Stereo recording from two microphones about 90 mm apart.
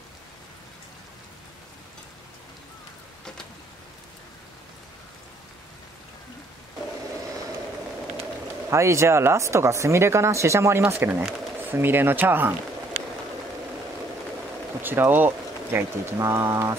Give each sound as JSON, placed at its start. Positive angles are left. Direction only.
{"t": 8.2, "sound": "speech", "side_deg": -30}
{"t": 14.8, "sound": "speech", "side_deg": -25}